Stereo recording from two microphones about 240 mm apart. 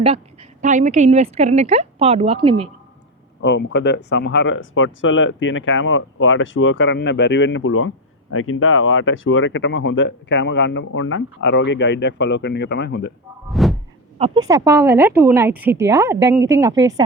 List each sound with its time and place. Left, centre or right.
0.6 s a woman's voice: right
3.4 s speech: left
13.5 s a sound: centre
14.4 s a woman's voice: centre